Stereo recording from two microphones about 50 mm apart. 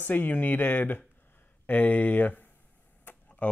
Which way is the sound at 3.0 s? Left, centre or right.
Left.